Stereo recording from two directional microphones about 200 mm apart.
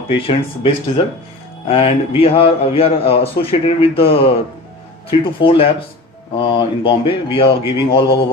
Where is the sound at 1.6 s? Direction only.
30° left (ahead or behind).